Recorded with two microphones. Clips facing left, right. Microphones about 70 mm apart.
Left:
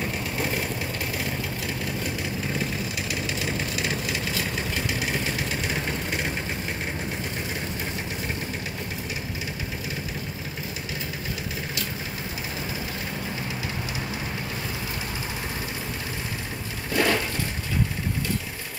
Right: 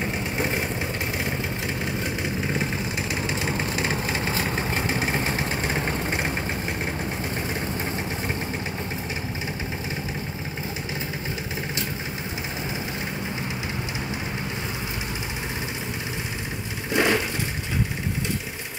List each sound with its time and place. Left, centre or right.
0.0 s vehicle: right
2.6 s vehicle: right
16.9 s vehicle: right